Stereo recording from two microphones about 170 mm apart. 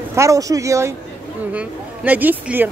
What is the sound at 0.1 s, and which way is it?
Speech, 20° right (ahead or behind).